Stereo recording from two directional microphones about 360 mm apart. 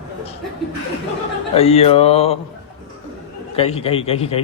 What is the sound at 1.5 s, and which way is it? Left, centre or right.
Speech, centre.